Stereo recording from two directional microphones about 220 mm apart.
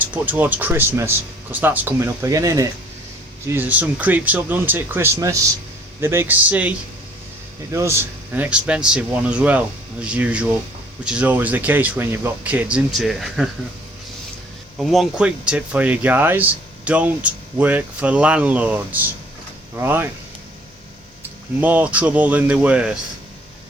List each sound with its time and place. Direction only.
0.0 s speech: 5° right (ahead or behind)
14.8 s speech: centre (ahead or behind)
21.6 s speech: 5° right (ahead or behind)